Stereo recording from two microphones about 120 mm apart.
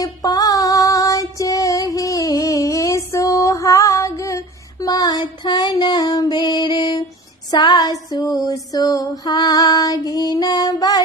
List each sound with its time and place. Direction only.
0.0 s child singing: 30° left (ahead or behind)
7.5 s female singing: 35° left (ahead or behind)